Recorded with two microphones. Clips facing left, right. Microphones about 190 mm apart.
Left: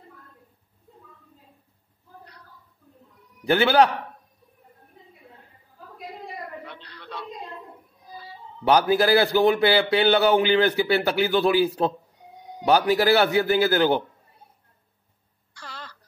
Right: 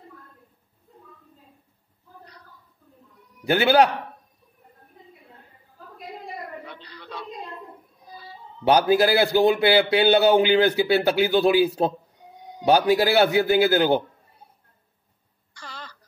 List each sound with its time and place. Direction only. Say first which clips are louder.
3.4 s a man's voice: even; 15° right (ahead or behind)
6.6 s a sound: right 1 dB; centre (ahead or behind)
8.7 s a man's voice: even; 20° right (ahead or behind)
15.5 s throat clearing: even; centre (ahead or behind)